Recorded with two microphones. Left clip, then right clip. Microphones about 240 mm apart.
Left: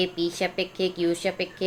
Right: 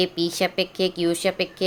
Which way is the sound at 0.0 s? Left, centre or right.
Right.